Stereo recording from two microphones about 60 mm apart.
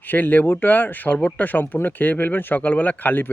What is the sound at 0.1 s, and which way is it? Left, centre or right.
Speech, left.